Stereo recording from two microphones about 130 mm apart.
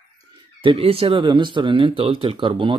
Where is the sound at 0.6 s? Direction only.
45° right (ahead or behind).